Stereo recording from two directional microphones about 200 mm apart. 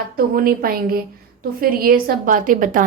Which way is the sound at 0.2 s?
45° right (ahead or behind).